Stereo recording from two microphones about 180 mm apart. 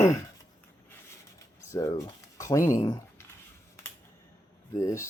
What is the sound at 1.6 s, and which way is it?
Speech, 15° left (ahead or behind).